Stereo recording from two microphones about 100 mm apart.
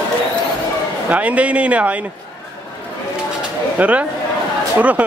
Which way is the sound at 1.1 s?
15° right (ahead or behind).